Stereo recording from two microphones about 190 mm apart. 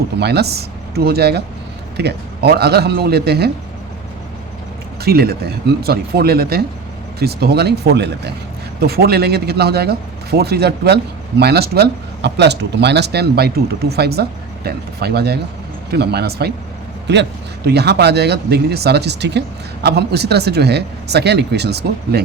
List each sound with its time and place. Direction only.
0.2 s speech: 60° right (ahead or behind)
5.0 s speech: 55° right (ahead or behind)